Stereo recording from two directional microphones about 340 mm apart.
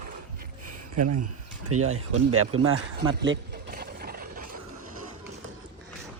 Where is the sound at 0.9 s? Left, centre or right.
Right.